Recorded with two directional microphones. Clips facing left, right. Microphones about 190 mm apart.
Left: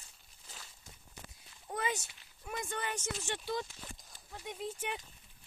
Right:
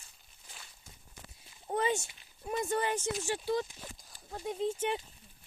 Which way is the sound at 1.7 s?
30° right (ahead or behind).